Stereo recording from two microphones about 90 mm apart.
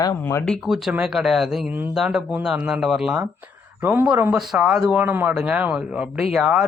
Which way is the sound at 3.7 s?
20° right (ahead or behind).